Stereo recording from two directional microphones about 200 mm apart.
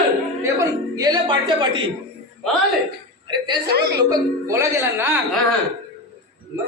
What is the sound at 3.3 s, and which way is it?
A man's voice, 20° right (ahead or behind).